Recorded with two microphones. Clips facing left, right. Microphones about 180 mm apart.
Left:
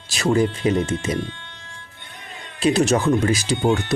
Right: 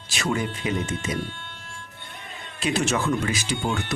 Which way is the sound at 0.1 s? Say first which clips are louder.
Left 8 dB; 35° left (ahead or behind).